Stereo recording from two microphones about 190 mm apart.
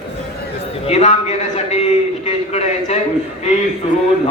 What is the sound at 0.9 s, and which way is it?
A man's voice, 35° left (ahead or behind).